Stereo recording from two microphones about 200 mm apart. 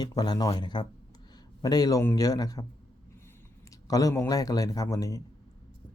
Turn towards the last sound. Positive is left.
turn(degrees=15)  # may be behind; listen again after turning